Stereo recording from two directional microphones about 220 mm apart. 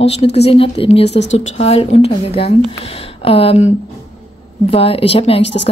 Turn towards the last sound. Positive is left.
turn(degrees=25)  # may be behind; listen again after turning